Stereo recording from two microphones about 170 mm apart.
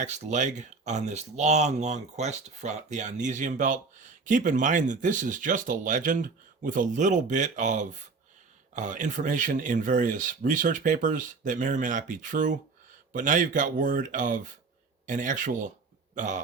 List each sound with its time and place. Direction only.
0.0 s speech: 45° right (ahead or behind)